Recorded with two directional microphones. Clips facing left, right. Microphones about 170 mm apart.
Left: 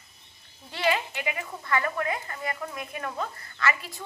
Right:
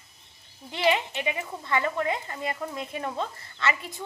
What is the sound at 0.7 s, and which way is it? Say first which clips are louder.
A woman's voice: right 2 dB; 20° right (ahead or behind).